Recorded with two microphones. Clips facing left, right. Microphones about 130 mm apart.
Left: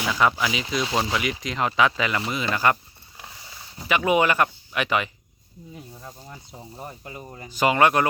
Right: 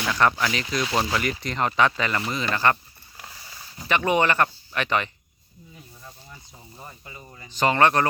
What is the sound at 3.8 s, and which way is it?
Speech, 5° left (ahead or behind).